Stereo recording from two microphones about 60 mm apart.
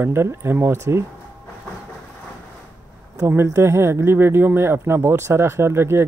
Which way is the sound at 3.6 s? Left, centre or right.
Right.